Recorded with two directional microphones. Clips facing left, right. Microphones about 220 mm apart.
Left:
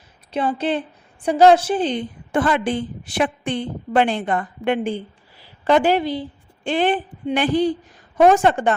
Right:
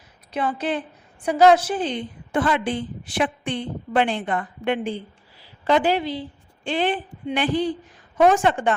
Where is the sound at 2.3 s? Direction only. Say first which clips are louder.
Left 2 dB; 50° left (ahead or behind).